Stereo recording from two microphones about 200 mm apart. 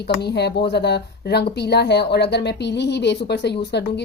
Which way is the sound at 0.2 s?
55° left (ahead or behind).